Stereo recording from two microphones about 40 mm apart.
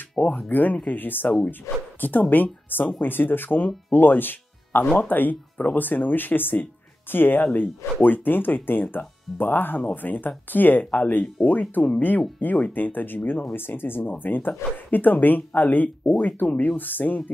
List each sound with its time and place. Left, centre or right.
0.2 s speech: left
4.9 s speech: left